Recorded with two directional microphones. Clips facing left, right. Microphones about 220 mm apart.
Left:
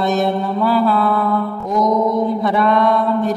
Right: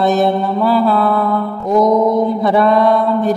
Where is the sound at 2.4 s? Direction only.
35° right (ahead or behind).